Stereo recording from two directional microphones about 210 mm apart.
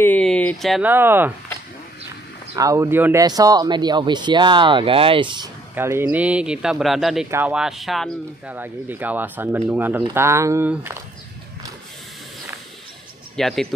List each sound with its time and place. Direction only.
0.0 s speech: 5° left (ahead or behind); by 1.3 s 10° right (ahead or behind)
2.5 s speech: 15° right (ahead or behind)
5.8 s speech: 10° right (ahead or behind)
13.4 s speech: centre (ahead or behind)